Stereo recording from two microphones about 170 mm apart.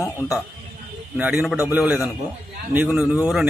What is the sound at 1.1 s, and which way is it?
A man's voice, 5° right (ahead or behind).